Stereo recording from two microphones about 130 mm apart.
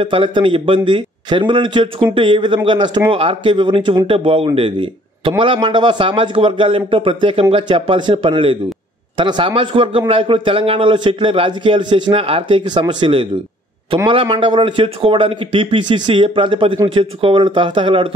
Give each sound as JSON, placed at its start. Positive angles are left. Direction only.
{"t": 0.0, "sound": "a man's voice", "side_deg": -40}